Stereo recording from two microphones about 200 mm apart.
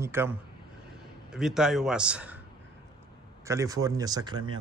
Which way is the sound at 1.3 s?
Centre (ahead or behind).